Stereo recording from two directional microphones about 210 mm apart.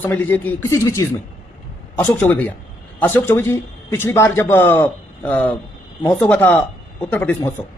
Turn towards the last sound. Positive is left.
turn(degrees=10)  # may be behind; listen again after turning